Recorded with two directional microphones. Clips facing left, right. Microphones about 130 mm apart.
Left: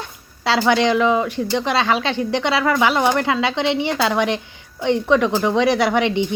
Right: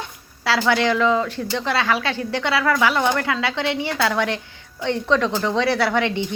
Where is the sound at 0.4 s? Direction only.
20° left (ahead or behind).